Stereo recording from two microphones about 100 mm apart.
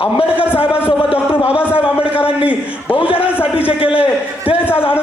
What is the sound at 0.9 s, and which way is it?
Speech, 65° left (ahead or behind).